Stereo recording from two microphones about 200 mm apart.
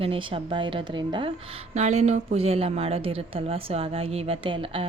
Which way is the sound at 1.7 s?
35° right (ahead or behind).